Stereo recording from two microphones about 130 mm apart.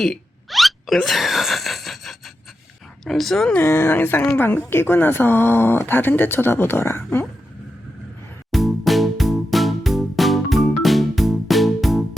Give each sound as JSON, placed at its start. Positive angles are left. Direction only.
{"t": 0.0, "sound": "hiccup", "side_deg": 0}
{"t": 3.0, "sound": "speech", "side_deg": 0}
{"t": 3.6, "sound": "speech", "side_deg": 15}
{"t": 8.5, "sound": "music", "side_deg": 0}